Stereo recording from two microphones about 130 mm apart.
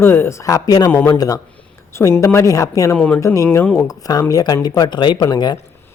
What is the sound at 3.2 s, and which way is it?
Speech, 20° left (ahead or behind).